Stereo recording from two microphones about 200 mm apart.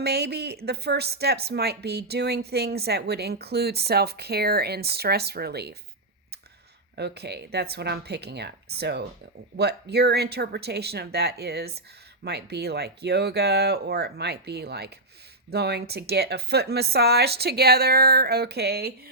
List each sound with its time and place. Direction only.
0.0 s a woman's voice: 55° right (ahead or behind)
6.9 s a woman's voice: 55° right (ahead or behind)